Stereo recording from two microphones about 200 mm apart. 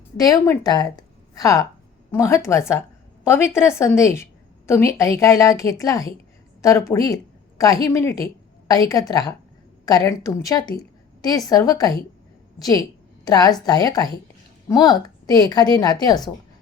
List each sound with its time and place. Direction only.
0.2 s a woman's voice: 15° left (ahead or behind)